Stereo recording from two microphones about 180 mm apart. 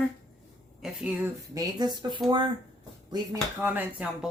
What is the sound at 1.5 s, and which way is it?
Speech, 25° right (ahead or behind).